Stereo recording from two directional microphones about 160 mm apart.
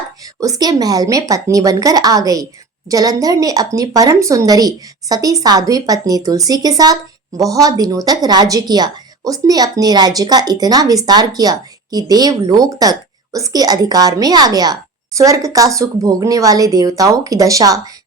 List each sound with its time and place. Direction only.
0.3 s a woman's voice: 20° right (ahead or behind)